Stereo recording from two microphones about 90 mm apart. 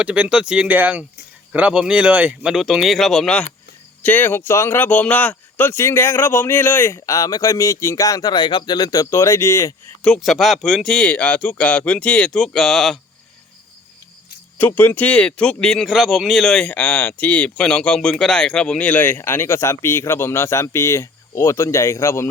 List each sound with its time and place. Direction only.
0.0 s speech: 15° right (ahead or behind)
2.5 s speech: 5° right (ahead or behind)
4.0 s speech: 20° left (ahead or behind); by 8.4 s 40° left (ahead or behind)
8.4 s speech: 60° left (ahead or behind); by 9.7 s 30° left (ahead or behind)
10.2 s speech: centre (ahead or behind)
14.7 s speech: 25° left (ahead or behind)